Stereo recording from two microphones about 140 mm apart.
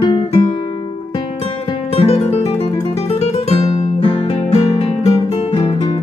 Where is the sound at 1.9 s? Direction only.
45° left (ahead or behind).